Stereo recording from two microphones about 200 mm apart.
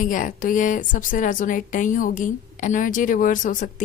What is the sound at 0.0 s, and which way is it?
Speech, 40° left (ahead or behind).